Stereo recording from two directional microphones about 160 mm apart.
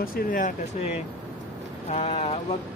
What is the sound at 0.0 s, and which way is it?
Speech, 60° left (ahead or behind).